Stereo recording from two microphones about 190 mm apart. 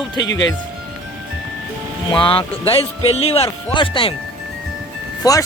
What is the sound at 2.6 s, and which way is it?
Speech, 30° left (ahead or behind).